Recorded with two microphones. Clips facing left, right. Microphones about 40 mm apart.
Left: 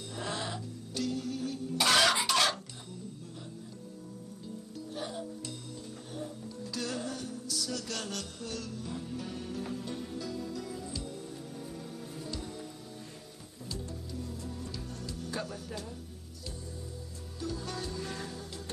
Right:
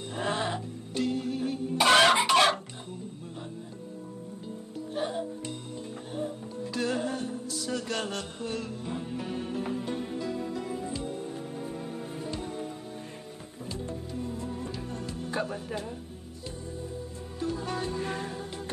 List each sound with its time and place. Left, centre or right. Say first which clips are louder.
0.1 s music: right 7 dB; right
4.9 s music: right 7 dB; right
13.7 s music: right 5 dB; right
17.4 s music: right 6 dB; right